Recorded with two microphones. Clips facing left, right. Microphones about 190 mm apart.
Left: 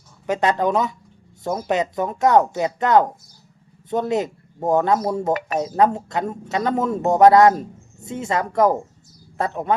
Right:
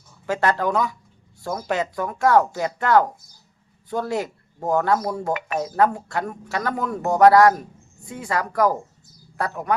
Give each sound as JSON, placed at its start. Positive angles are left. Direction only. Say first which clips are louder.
{"t": 0.3, "sound": "a man's voice", "louder": "left 2 dB", "side_deg": 20}